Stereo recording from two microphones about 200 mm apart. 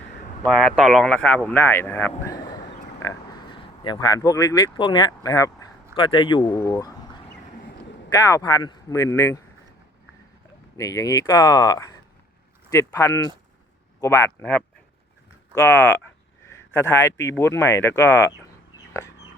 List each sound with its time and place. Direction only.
0.4 s speech: centre (ahead or behind); by 6.5 s 25° left (ahead or behind)
6.5 s speech: 10° left (ahead or behind)
8.1 s speech: 15° left (ahead or behind)
10.8 s speech: 15° left (ahead or behind)